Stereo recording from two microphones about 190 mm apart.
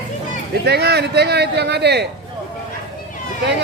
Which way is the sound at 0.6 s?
60° right (ahead or behind).